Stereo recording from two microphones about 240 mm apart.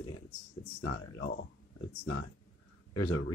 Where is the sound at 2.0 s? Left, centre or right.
Left.